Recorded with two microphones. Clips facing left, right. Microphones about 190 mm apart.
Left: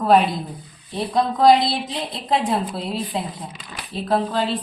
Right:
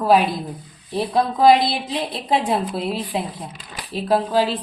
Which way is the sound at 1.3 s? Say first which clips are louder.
Even; 5° right (ahead or behind).